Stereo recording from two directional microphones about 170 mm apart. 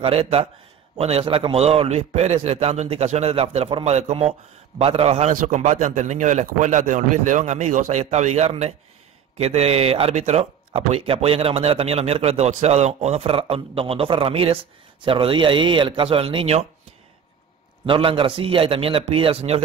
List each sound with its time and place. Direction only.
0.0 s speech: 35° right (ahead or behind)
5.3 s a man's voice: 50° right (ahead or behind); by 16.6 s 35° right (ahead or behind)
17.8 s speech: 30° right (ahead or behind)